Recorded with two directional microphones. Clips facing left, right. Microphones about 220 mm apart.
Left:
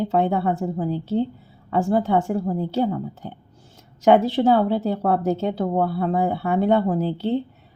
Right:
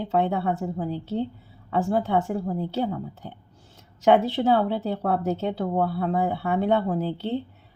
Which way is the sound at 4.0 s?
45° left (ahead or behind).